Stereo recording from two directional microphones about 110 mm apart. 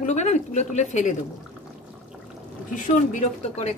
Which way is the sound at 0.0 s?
90° left.